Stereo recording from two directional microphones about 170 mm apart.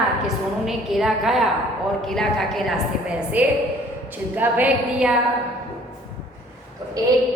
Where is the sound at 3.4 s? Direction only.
10° right (ahead or behind).